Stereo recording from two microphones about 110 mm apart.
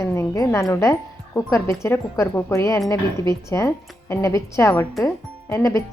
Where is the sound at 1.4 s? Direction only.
25° left (ahead or behind).